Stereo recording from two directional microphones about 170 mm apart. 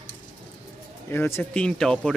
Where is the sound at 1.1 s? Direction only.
15° left (ahead or behind).